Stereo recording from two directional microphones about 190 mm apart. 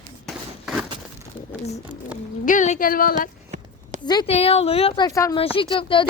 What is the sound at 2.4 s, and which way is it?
Speech, 40° left (ahead or behind).